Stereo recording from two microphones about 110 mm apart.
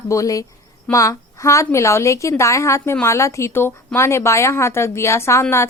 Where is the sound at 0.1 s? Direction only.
30° left (ahead or behind).